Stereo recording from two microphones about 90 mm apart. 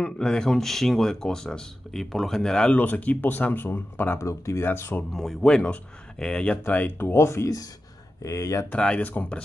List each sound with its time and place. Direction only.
0.0 s speech: 10° left (ahead or behind)
4.3 s speech: 35° left (ahead or behind)
4.6 s speech: 25° left (ahead or behind)
5.1 s speech: 5° left (ahead or behind)
6.6 s speech: 20° left (ahead or behind)
8.6 s speech: 15° left (ahead or behind)